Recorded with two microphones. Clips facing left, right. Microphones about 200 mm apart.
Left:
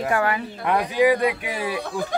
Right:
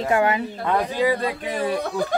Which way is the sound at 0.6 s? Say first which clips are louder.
Left 3 dB; 15° left (ahead or behind).